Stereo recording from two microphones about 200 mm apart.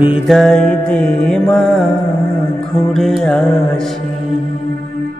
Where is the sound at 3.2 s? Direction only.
5° left (ahead or behind).